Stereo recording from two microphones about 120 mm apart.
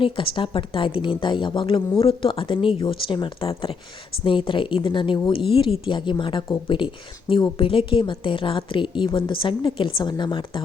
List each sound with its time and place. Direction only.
0.0 s a woman's voice: 45° left (ahead or behind)